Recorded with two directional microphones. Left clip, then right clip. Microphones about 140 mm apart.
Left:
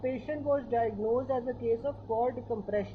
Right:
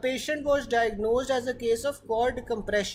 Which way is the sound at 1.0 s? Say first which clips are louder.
Right 4 dB; 55° right (ahead or behind).